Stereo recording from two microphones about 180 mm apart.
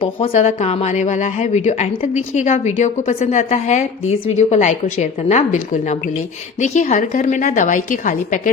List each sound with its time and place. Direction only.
0.0 s a woman's voice: 35° left (ahead or behind)